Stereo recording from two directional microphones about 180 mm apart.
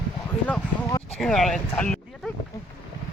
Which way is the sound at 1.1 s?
Centre (ahead or behind).